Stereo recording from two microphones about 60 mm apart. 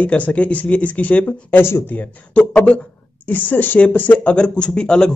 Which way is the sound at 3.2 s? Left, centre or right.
Left.